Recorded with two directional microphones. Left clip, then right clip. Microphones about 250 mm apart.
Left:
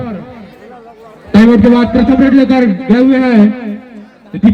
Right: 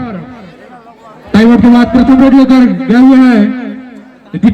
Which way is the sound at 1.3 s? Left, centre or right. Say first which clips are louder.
Right 1 dB; right.